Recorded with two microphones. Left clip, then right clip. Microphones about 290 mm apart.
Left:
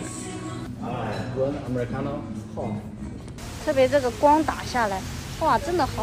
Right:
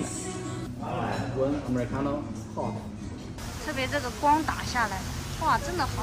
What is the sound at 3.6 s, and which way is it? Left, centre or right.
Speech, centre.